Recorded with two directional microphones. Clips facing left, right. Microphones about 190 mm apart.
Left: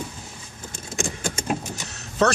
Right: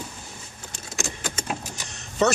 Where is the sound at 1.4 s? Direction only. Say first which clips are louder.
Left 5 dB; 5° left (ahead or behind).